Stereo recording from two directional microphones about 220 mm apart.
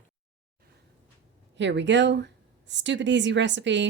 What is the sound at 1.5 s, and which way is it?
Speech, 55° right (ahead or behind).